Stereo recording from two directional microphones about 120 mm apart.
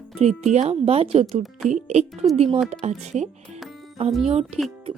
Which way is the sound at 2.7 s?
70° right (ahead or behind).